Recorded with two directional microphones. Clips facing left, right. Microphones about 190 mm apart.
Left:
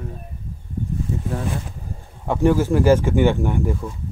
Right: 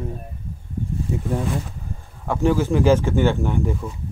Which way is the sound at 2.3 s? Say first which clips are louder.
Left 2 dB; 15° left (ahead or behind).